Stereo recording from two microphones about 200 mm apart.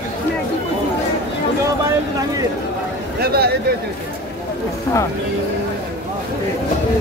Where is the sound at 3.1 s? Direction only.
50° right (ahead or behind).